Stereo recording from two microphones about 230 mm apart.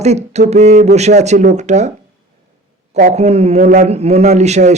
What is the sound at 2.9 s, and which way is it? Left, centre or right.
A man's voice, right.